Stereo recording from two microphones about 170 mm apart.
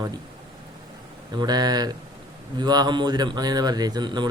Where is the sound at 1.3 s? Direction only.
25° right (ahead or behind).